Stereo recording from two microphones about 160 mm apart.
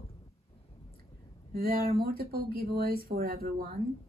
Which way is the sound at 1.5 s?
70° right (ahead or behind).